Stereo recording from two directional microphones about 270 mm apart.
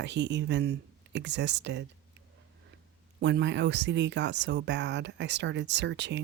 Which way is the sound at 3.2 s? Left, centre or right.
Right.